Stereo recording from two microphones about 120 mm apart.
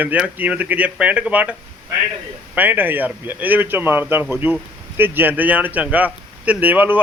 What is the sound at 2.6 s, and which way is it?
A man's voice, 15° right (ahead or behind).